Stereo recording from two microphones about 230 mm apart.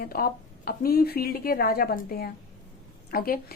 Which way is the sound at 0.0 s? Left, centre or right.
Left.